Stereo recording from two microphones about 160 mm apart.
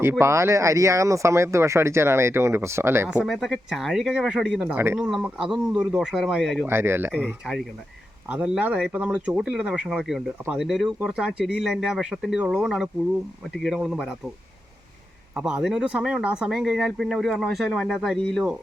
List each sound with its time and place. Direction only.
0.0 s speech: 15° right (ahead or behind); by 6.7 s centre (ahead or behind)
6.7 s speech: 15° right (ahead or behind)
8.3 s speech: 10° right (ahead or behind)
15.4 s speech: 5° right (ahead or behind)